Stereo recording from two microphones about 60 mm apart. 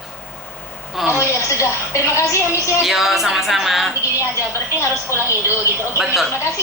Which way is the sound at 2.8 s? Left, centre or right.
Centre.